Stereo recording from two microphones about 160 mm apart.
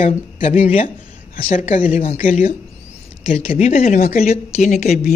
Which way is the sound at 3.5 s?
45° left (ahead or behind).